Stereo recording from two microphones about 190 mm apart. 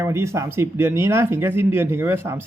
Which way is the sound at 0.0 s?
15° right (ahead or behind).